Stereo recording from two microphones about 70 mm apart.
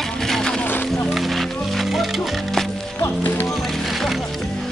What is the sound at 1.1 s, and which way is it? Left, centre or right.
Music, centre.